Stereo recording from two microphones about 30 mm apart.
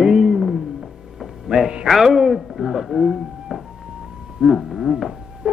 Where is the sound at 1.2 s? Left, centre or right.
Centre.